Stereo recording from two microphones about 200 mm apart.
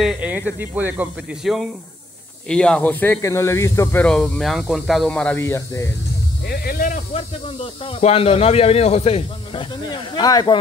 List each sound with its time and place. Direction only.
0.0 s speech: 5° right (ahead or behind); by 5.9 s 15° left (ahead or behind)
6.4 s speech: 50° left (ahead or behind); by 10.6 s 20° left (ahead or behind)